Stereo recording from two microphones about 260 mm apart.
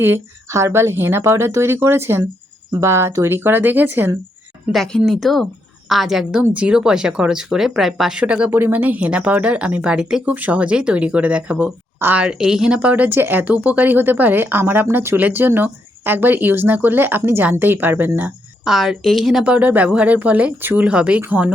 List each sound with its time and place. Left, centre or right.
0.0 s a woman's voice: centre